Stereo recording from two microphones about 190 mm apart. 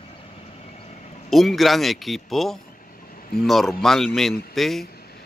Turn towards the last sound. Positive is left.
turn(degrees=0)  # may be behind; listen again after turning